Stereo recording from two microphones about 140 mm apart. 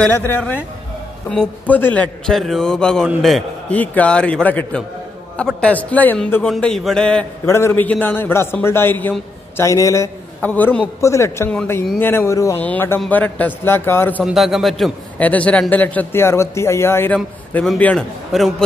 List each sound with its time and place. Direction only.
0.0 s a man's voice: 15° left (ahead or behind)
3.7 s a man's voice: 10° left (ahead or behind)
7.4 s a man's voice: 20° left (ahead or behind)
10.4 s a man's voice: 10° left (ahead or behind)
11.0 s a man's voice: 20° left (ahead or behind)
14.2 s a man's voice: centre (ahead or behind)
15.1 s a man's voice: 10° left (ahead or behind)